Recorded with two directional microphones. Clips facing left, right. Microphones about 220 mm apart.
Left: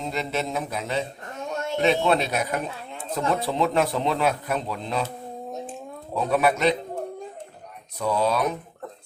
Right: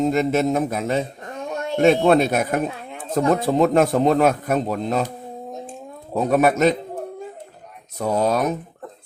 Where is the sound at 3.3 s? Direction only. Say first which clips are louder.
Right 6 dB; 45° right (ahead or behind).